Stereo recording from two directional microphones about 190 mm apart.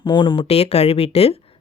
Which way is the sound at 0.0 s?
25° left (ahead or behind).